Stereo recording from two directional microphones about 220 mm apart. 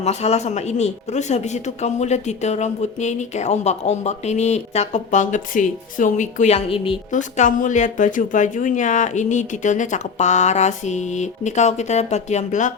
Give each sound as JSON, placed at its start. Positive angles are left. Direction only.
{"t": 0.0, "sound": "speech", "side_deg": 30}